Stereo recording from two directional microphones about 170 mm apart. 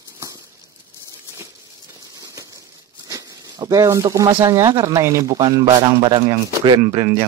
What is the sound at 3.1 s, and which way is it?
Speech, 20° right (ahead or behind).